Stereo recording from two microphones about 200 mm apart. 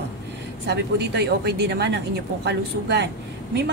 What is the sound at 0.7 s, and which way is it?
A woman's voice, 55° right (ahead or behind).